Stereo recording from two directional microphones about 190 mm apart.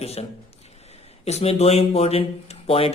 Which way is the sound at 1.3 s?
35° left (ahead or behind).